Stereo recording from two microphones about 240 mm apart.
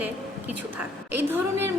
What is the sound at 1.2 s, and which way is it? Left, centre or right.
Speech, centre.